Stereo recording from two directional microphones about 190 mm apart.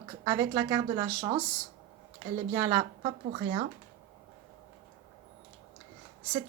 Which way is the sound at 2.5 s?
20° right (ahead or behind).